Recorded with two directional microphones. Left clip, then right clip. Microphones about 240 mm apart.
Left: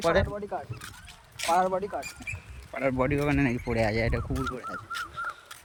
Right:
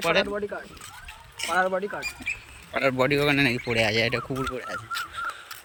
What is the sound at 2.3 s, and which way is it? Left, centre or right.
Speech, centre.